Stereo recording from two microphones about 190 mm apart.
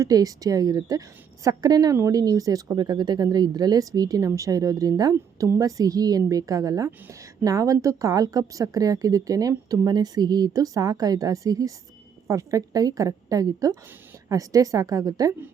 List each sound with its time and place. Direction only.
0.0 s a woman's voice: 20° right (ahead or behind)